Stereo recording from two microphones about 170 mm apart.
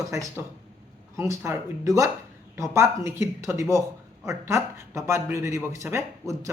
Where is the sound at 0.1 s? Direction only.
15° right (ahead or behind).